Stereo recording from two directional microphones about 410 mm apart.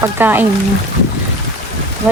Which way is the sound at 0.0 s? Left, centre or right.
Centre.